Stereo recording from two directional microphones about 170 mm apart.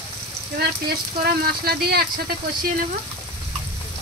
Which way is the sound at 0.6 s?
65° right (ahead or behind).